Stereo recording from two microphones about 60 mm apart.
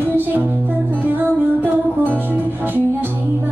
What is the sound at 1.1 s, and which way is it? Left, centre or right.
Music, right.